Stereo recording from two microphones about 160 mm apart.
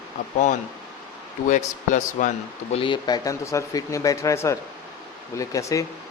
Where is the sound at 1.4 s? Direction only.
50° left (ahead or behind).